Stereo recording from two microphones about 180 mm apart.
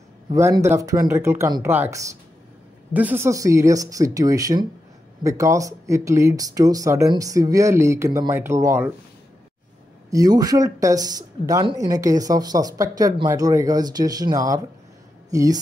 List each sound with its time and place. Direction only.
0.3 s speech: 15° right (ahead or behind)
10.0 s speech: 20° right (ahead or behind)